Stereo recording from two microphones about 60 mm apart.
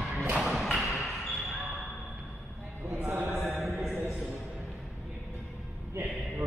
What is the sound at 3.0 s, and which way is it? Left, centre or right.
Mantra, right.